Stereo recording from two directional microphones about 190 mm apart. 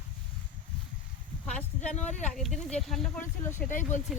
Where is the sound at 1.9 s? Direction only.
35° left (ahead or behind).